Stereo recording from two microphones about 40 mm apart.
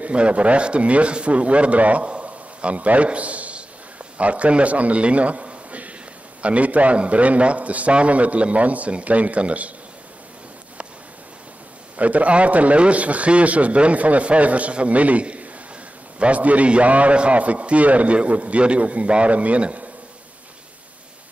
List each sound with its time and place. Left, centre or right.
0.0 s a man's voice: right
2.2 s a sound: right
4.2 s a man's voice: right
12.0 s a man's voice: right